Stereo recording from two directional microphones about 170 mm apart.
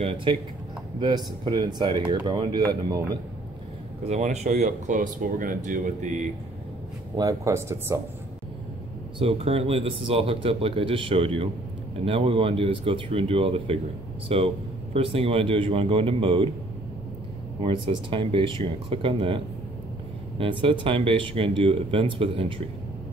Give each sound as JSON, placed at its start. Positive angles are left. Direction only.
{"t": 0.0, "sound": "speech", "side_deg": -30}
{"t": 4.0, "sound": "speech", "side_deg": -40}
{"t": 7.2, "sound": "speech", "side_deg": -20}
{"t": 9.2, "sound": "speech", "side_deg": -35}
{"t": 17.6, "sound": "speech", "side_deg": -30}